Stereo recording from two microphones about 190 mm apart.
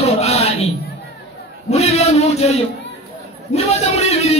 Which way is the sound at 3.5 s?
35° left (ahead or behind).